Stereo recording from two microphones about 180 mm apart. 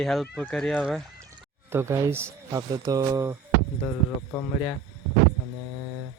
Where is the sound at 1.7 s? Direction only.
15° right (ahead or behind).